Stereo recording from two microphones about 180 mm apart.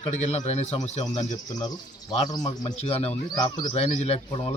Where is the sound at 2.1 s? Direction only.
25° left (ahead or behind).